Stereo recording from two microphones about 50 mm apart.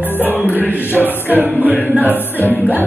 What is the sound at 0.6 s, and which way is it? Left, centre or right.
Music, right.